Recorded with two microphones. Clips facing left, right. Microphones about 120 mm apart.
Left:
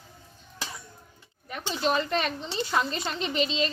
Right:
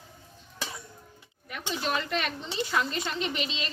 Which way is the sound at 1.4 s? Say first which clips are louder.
Left 4 dB; 30° left (ahead or behind).